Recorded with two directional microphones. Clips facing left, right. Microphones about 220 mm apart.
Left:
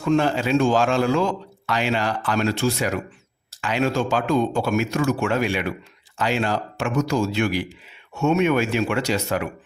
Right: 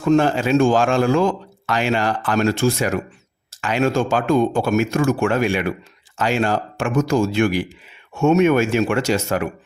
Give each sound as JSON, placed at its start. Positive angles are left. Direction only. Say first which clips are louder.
{"t": 0.0, "sound": "a man's voice", "louder": "right 4 dB", "side_deg": -45}